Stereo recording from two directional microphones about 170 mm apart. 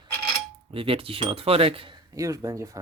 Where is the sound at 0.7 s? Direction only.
35° right (ahead or behind).